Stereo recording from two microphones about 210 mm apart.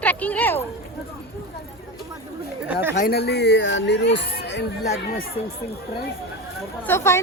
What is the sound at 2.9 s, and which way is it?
Speech, 45° left (ahead or behind).